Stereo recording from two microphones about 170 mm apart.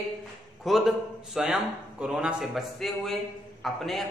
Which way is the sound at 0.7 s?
Centre (ahead or behind).